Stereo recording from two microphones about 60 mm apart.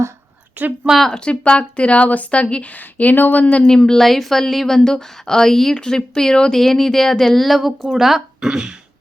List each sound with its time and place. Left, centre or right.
0.9 s speech: centre; by 3.6 s left
3.7 s speech: centre